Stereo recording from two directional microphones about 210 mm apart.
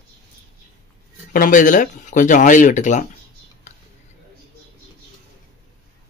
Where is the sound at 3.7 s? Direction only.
35° left (ahead or behind).